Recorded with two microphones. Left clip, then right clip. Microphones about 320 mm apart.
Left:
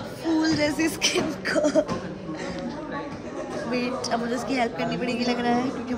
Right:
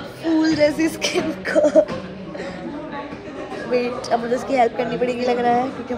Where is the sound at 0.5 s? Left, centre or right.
Centre.